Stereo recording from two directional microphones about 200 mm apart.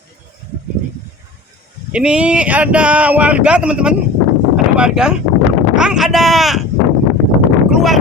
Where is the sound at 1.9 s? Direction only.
5° right (ahead or behind).